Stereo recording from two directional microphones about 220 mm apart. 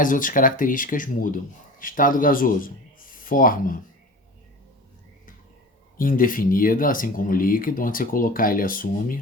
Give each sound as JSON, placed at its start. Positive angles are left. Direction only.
{"t": 0.0, "sound": "speech", "side_deg": 35}
{"t": 6.0, "sound": "speech", "side_deg": 40}